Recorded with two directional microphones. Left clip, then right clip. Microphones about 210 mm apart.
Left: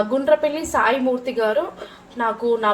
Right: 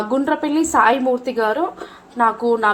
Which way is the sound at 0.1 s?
35° right (ahead or behind).